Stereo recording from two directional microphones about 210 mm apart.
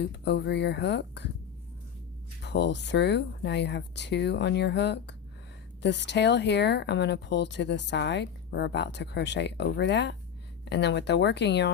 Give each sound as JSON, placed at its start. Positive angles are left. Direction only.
{"t": 0.0, "sound": "speech", "side_deg": 55}
{"t": 2.4, "sound": "speech", "side_deg": 55}